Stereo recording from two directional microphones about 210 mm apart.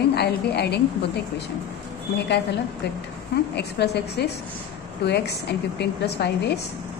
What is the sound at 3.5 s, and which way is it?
A woman's voice, 50° left (ahead or behind).